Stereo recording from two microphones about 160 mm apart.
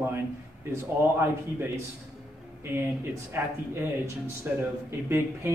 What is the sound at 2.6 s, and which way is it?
Speech, 15° right (ahead or behind).